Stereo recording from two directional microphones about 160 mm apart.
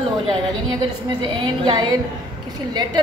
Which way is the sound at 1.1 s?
30° right (ahead or behind).